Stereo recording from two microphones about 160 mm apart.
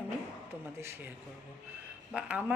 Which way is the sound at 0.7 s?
15° right (ahead or behind).